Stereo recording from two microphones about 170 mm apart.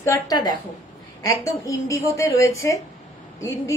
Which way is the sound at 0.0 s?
20° left (ahead or behind).